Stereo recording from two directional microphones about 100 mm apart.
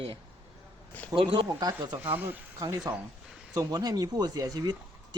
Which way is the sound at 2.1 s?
20° right (ahead or behind).